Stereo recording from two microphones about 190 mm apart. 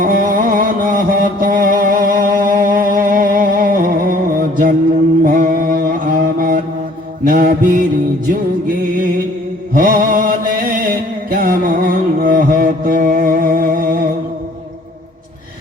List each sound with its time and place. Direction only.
0.0 s music: 45° right (ahead or behind)
5.2 s mantra: 45° right (ahead or behind)
8.9 s mantra: 45° right (ahead or behind)